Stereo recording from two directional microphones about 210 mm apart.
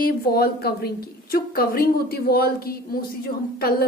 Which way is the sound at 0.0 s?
45° left (ahead or behind).